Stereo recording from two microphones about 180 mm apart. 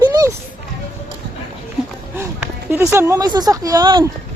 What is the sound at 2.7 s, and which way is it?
Speech, 15° right (ahead or behind).